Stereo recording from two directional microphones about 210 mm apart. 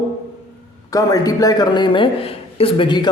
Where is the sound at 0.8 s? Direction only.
15° left (ahead or behind).